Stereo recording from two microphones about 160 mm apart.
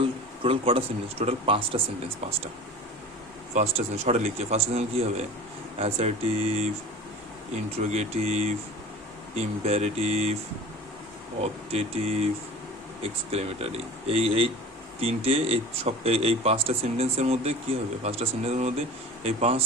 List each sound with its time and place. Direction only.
0.4 s speech: 35° right (ahead or behind)
3.5 s a man's voice: 40° right (ahead or behind)
11.3 s speech: 40° right (ahead or behind)